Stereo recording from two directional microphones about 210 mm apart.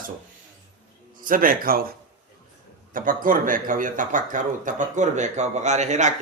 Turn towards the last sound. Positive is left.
turn(degrees=-35)  # may be behind; listen again after turning